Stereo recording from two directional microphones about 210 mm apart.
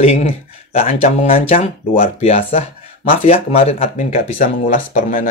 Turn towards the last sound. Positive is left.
turn(degrees=40)  # may be behind; listen again after turning